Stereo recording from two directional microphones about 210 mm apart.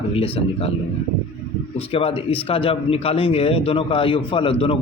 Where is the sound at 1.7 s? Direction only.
25° left (ahead or behind).